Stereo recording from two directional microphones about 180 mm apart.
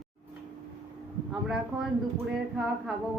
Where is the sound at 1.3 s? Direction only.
Centre (ahead or behind).